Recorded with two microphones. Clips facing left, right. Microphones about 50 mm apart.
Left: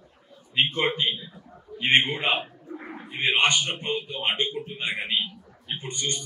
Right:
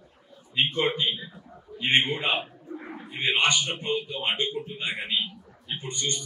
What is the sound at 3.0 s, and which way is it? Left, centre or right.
A man's voice, left.